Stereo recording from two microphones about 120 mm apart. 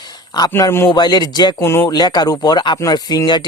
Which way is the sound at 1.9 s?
35° left (ahead or behind).